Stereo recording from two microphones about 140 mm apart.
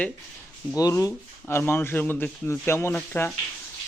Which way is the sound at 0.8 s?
25° left (ahead or behind).